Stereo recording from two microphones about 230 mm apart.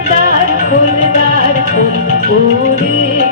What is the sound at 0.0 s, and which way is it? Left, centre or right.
Music, right.